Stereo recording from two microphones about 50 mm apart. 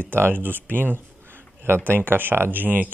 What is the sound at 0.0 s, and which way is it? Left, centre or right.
Speech, right.